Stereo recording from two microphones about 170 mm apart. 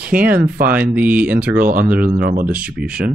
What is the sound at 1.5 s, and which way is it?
Speech, 55° right (ahead or behind).